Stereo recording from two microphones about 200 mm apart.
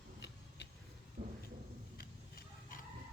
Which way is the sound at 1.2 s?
40° right (ahead or behind).